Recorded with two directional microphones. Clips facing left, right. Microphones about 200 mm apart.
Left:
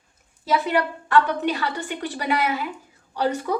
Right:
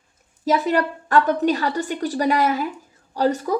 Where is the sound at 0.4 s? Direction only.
40° right (ahead or behind).